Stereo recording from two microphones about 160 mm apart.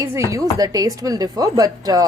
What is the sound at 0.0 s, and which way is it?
A woman's voice, 20° right (ahead or behind).